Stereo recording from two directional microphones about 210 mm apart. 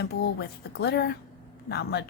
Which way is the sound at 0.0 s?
50° left (ahead or behind).